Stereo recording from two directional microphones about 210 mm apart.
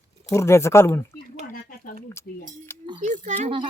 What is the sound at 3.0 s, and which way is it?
Speech, 35° right (ahead or behind).